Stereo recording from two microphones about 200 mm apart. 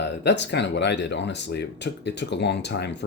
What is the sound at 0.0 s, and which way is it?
Speech, 60° left (ahead or behind).